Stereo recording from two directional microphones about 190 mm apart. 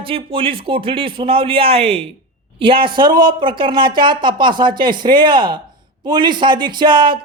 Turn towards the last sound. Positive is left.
turn(degrees=-25)  # may be behind; listen again after turning